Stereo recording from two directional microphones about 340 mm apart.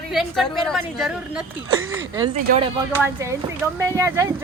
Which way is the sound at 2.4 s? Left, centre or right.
Centre.